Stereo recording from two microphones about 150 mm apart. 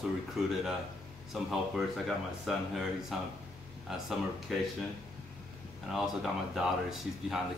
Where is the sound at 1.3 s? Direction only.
Centre (ahead or behind).